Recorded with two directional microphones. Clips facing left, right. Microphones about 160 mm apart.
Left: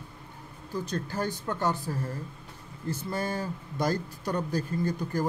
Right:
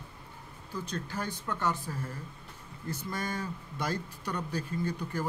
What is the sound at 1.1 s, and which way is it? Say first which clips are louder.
Speech: left 4 dB; 35° left (ahead or behind).